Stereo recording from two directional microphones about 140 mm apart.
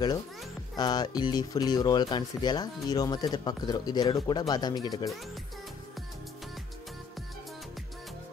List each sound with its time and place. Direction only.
0.7 s speech: 30° left (ahead or behind)
5.1 s speech: centre (ahead or behind)